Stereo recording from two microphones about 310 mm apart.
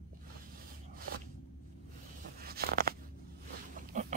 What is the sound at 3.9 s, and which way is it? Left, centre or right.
Pig, right.